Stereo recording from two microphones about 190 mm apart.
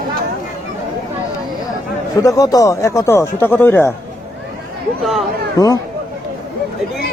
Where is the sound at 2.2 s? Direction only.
20° left (ahead or behind).